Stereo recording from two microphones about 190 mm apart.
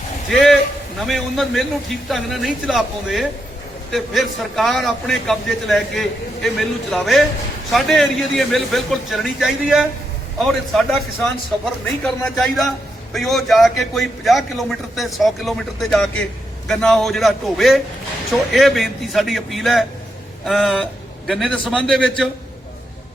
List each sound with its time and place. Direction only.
0.3 s a man's voice: centre (ahead or behind)